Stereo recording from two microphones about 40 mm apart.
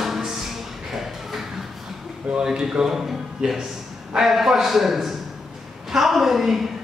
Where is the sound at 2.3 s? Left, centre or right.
Centre.